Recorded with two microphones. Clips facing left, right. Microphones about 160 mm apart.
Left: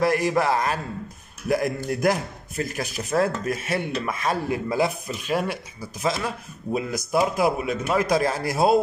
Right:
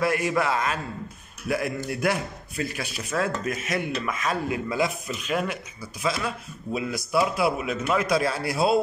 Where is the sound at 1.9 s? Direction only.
40° left (ahead or behind).